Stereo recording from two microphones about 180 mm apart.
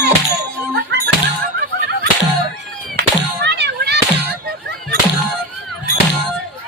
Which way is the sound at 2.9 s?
70° right (ahead or behind).